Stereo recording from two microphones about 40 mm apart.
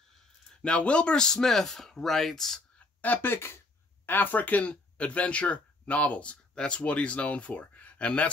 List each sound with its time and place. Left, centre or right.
0.7 s speech: left; by 2.6 s centre
3.2 s speech: left
6.5 s speech: left